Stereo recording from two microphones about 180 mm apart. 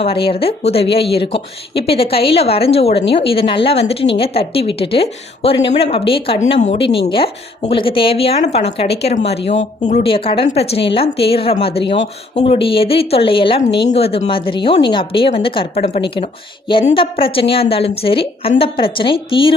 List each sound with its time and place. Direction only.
0.0 s a woman's voice: 30° left (ahead or behind)